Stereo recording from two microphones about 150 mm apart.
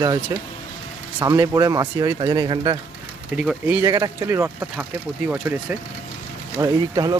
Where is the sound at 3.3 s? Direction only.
Centre (ahead or behind).